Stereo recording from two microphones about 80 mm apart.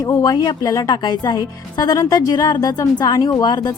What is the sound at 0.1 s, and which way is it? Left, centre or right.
A woman's voice, left.